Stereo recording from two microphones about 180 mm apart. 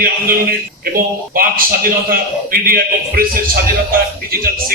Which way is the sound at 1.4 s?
55° right (ahead or behind).